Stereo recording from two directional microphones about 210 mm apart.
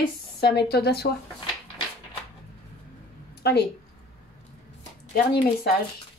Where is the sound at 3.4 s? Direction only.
55° left (ahead or behind).